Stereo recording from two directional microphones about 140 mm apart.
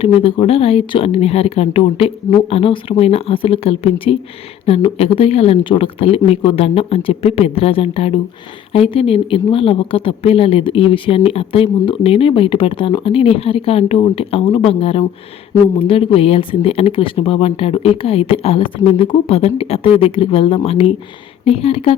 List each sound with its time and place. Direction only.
0.0 s a woman's voice: 40° left (ahead or behind)